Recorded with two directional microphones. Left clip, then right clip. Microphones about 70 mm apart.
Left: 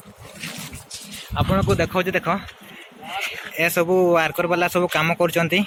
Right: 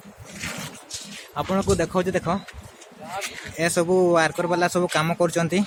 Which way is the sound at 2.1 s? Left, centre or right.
Right.